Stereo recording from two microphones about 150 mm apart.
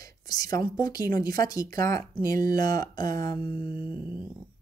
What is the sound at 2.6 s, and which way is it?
Speech, 25° left (ahead or behind).